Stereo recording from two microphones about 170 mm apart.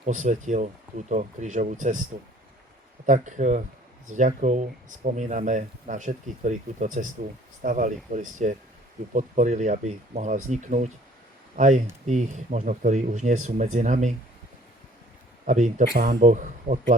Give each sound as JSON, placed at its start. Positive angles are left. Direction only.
{"t": 0.0, "sound": "speech", "side_deg": -45}
{"t": 3.1, "sound": "speech", "side_deg": -45}
{"t": 15.4, "sound": "speech", "side_deg": -45}
{"t": 15.8, "sound": "speech", "side_deg": -65}
{"t": 16.2, "sound": "speech", "side_deg": -50}